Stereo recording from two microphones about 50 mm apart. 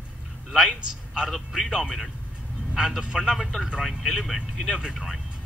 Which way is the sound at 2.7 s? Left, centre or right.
Centre.